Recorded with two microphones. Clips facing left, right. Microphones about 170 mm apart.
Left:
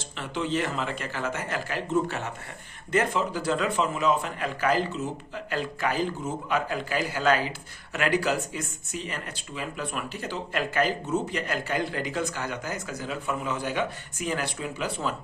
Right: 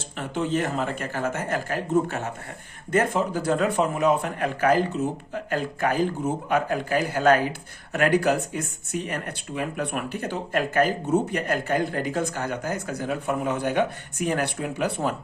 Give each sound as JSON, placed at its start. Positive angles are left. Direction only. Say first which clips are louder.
{"t": 0.2, "sound": "speech", "louder": "right 3 dB", "side_deg": -50}